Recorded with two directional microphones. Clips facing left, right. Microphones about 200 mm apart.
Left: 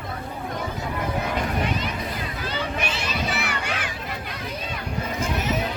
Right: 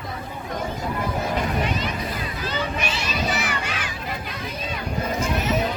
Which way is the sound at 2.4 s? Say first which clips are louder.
Right 1 dB; 55° left (ahead or behind).